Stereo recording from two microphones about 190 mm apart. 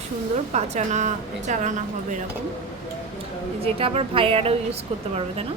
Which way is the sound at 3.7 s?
30° right (ahead or behind).